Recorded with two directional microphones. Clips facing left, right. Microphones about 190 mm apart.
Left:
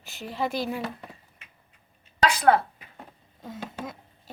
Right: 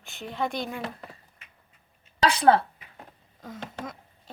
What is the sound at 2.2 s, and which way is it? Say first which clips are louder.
Speech: right 1 dB; 30° right (ahead or behind).